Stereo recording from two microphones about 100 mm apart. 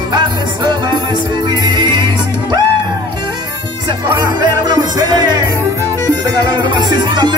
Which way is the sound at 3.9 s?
45° right (ahead or behind).